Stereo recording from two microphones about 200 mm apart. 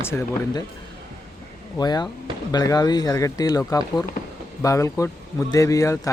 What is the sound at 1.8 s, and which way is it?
Speech, 20° left (ahead or behind).